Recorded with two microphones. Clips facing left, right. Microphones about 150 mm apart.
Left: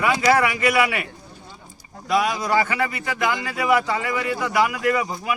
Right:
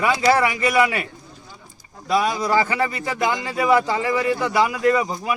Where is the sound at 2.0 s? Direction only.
30° right (ahead or behind).